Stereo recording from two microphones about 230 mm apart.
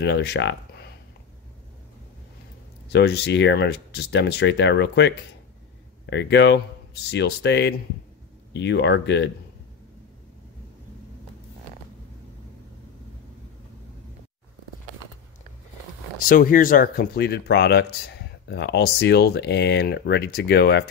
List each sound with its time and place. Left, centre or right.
0.0 s speech: left
2.9 s speech: left
16.3 s speech: left